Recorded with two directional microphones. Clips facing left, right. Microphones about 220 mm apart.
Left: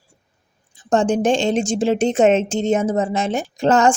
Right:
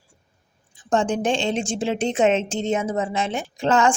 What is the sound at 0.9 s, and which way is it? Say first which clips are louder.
A woman's voice: left 5 dB; 45° left (ahead or behind).